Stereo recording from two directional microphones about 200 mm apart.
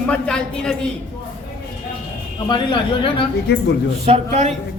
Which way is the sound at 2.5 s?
25° left (ahead or behind).